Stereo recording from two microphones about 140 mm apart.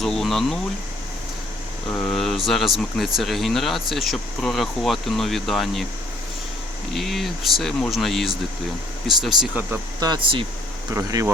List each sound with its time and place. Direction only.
0.0 s a sound: centre (ahead or behind)
1.9 s speech: 5° left (ahead or behind)
6.9 s speech: centre (ahead or behind)
10.0 s speech: 35° right (ahead or behind)
10.9 s speech: 25° right (ahead or behind)